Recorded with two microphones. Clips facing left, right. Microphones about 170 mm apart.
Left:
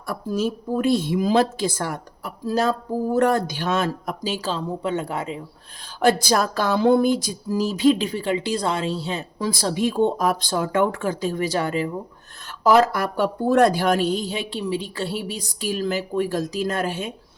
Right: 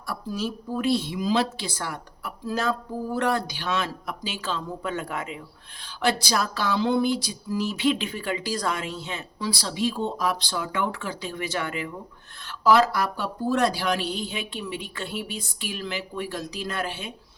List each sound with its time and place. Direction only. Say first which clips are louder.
0.1 s speech: left 6 dB; 45° left (ahead or behind); by 5.4 s 30° left (ahead or behind)
6.0 s speech: left 6 dB; 50° left (ahead or behind)
12.5 s speech: left 3 dB; 45° left (ahead or behind)